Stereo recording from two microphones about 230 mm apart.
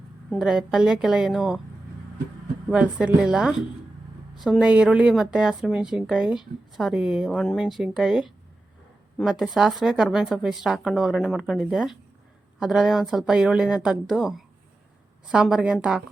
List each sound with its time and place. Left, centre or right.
0.3 s a woman's voice: centre
2.6 s a woman's voice: centre